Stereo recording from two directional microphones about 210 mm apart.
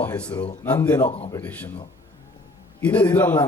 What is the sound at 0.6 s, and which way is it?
A man's voice, 10° left (ahead or behind).